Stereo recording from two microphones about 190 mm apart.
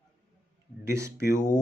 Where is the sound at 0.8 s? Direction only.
15° right (ahead or behind).